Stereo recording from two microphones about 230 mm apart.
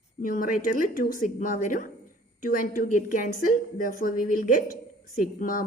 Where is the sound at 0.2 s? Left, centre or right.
Left.